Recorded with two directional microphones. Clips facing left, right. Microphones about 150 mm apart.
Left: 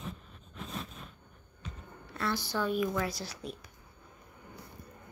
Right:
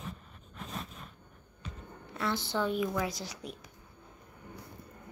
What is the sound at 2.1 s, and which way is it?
A woman's voice, 20° right (ahead or behind).